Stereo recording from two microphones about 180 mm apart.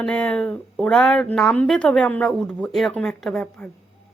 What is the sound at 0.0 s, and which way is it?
A woman's voice, 5° left (ahead or behind).